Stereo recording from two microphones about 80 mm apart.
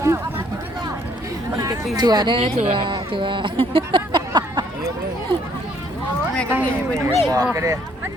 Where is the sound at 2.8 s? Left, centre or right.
Right.